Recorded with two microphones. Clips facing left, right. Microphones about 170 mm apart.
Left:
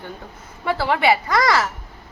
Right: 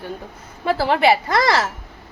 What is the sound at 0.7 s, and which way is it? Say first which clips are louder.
Speech: right 2 dB; 30° right (ahead or behind).